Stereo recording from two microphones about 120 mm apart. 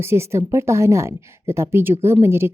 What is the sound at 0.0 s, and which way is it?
Speech, 20° right (ahead or behind).